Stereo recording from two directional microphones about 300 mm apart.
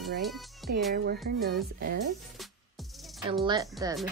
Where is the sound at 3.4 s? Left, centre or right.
Centre.